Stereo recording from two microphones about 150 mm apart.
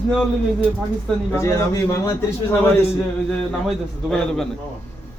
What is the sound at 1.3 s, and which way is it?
Speech, 20° left (ahead or behind).